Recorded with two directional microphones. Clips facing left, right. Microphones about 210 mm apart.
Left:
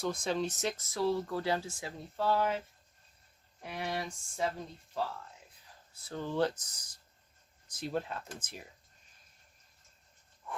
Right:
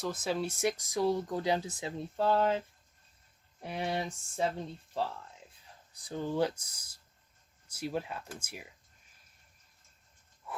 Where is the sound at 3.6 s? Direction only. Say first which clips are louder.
Right 3 dB; 30° right (ahead or behind).